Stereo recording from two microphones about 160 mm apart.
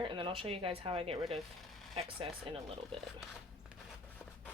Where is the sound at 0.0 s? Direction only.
30° right (ahead or behind).